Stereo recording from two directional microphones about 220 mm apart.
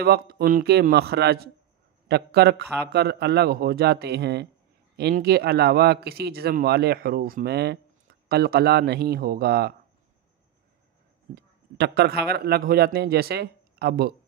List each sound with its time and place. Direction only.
0.0 s speech: 45° right (ahead or behind)
11.3 s speech: 50° right (ahead or behind)